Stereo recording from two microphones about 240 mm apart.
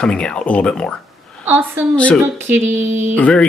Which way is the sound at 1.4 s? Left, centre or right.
Centre.